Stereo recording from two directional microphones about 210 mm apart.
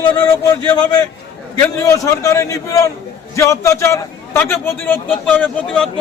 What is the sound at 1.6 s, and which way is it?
A man's voice, 15° left (ahead or behind).